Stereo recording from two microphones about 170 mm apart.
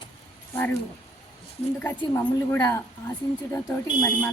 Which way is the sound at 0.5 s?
10° left (ahead or behind).